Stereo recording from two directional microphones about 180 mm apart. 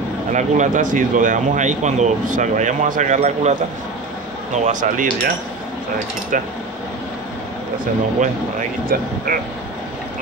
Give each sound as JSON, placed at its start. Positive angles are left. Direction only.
{"t": 0.3, "sound": "speech", "side_deg": -45}
{"t": 4.6, "sound": "speech", "side_deg": -45}
{"t": 6.3, "sound": "speech", "side_deg": -45}
{"t": 8.9, "sound": "speech", "side_deg": -55}